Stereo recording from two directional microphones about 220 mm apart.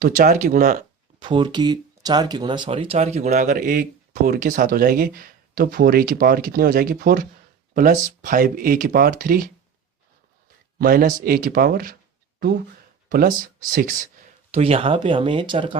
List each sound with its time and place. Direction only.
0.0 s speech: 40° right (ahead or behind)
1.2 s speech: 20° right (ahead or behind); by 9.5 s 40° right (ahead or behind)
10.8 s speech: 40° right (ahead or behind)
14.5 s speech: 25° right (ahead or behind)